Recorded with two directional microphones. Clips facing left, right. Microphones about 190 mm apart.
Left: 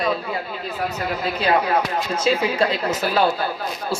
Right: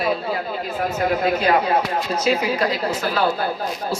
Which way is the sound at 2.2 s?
30° left (ahead or behind).